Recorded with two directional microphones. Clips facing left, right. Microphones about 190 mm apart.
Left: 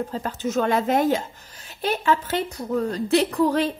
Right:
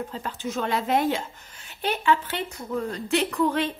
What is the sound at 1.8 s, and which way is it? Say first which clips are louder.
Cutlery: left 1 dB; 40° left (ahead or behind).